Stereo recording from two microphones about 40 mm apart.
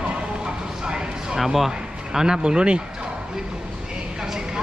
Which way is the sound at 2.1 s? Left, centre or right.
Centre.